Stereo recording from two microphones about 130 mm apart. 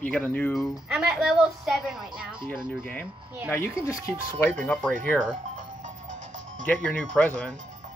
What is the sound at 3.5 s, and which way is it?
Speech, 20° left (ahead or behind).